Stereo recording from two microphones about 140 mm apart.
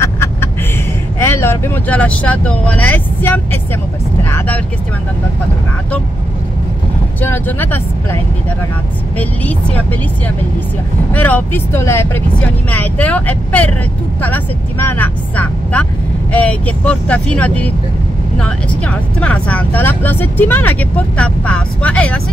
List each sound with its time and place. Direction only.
0.0 s a sound: 20° left (ahead or behind)
1.2 s speech: 20° left (ahead or behind)
7.2 s speech: 15° left (ahead or behind)
9.2 s speech: 10° left (ahead or behind)
11.1 s speech: 10° left (ahead or behind)